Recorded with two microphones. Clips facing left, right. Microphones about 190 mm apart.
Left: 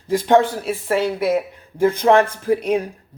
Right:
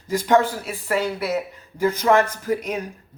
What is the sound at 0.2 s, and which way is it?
Speech, 25° left (ahead or behind).